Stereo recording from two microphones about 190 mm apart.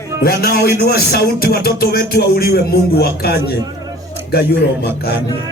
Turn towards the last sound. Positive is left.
turn(degrees=55)  # may be behind; listen again after turning